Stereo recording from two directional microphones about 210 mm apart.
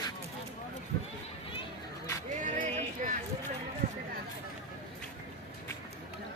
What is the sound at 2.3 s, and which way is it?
Music, 35° right (ahead or behind).